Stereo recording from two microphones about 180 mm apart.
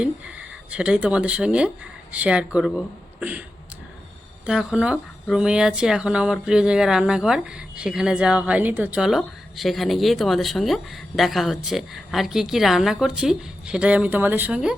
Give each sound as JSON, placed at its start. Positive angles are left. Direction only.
{"t": 0.0, "sound": "speech", "side_deg": -5}
{"t": 4.4, "sound": "speech", "side_deg": -5}